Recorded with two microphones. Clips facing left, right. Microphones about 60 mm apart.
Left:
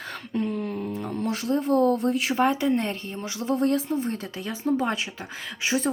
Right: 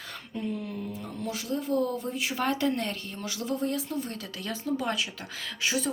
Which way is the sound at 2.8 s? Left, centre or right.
Left.